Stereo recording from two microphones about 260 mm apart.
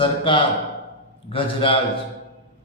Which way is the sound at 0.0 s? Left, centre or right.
Centre.